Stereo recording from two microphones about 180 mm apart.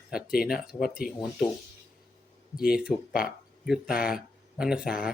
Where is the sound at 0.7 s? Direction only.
55° left (ahead or behind).